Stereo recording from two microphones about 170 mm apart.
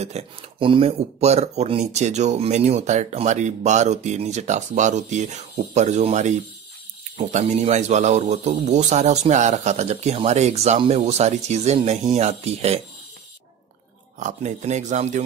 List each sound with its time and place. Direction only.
0.0 s speech: 35° right (ahead or behind)
14.2 s speech: 40° right (ahead or behind)